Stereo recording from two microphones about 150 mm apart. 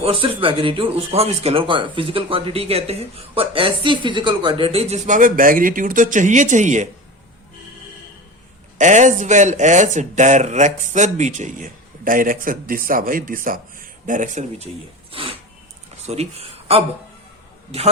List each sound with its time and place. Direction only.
0.0 s speech: 35° right (ahead or behind); by 6.8 s 55° right (ahead or behind)
8.8 s speech: 55° right (ahead or behind)
15.1 s a sound: 35° right (ahead or behind)
16.0 s speech: 45° right (ahead or behind)